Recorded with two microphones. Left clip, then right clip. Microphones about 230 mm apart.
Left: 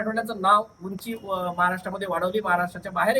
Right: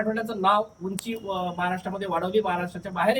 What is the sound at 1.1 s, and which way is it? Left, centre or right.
Speech, left.